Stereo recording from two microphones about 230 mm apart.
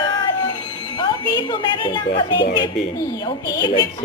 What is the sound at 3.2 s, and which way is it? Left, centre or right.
Speech, centre.